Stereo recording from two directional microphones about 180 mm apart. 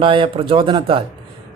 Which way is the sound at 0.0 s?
30° right (ahead or behind).